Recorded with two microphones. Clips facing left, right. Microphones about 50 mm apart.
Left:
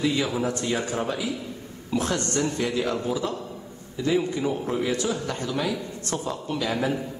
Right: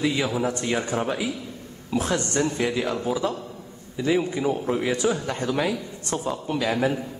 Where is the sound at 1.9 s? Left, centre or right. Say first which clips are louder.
Right 1 dB; centre; by 5.8 s right.